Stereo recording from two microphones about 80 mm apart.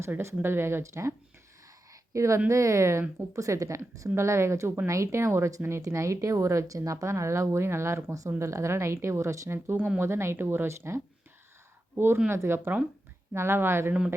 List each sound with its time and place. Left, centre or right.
0.0 s a woman's voice: right
1.9 s a sound: right
2.5 s a woman's voice: right
9.7 s speech: centre
10.0 s a woman's voice: right